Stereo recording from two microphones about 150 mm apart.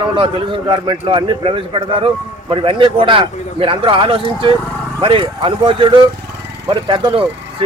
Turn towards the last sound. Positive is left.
turn(degrees=-35)  # may be behind; listen again after turning